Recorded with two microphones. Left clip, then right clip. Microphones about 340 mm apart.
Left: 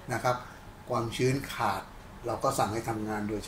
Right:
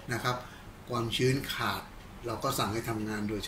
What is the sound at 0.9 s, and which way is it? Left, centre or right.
Speech, centre.